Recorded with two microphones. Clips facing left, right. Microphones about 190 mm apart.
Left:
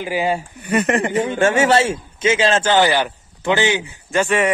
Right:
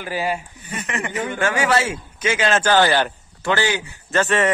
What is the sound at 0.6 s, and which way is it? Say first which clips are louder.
Speech: left 13 dB; 65° left (ahead or behind).